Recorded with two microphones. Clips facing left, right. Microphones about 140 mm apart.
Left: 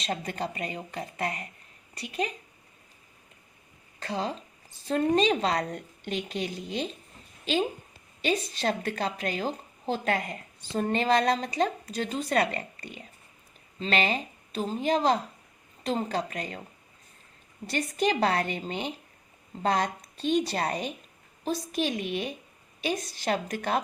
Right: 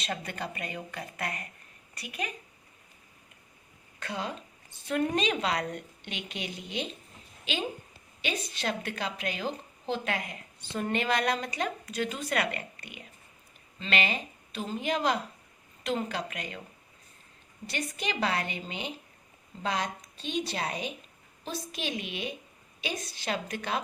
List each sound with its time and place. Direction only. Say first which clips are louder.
0.0 s a woman's voice: left 4 dB; 35° left (ahead or behind)
4.0 s a woman's voice: left 4 dB; 35° left (ahead or behind)
8.2 s a woman's voice: left 6 dB; 35° left (ahead or behind)
17.7 s a woman's voice: left 7 dB; 40° left (ahead or behind)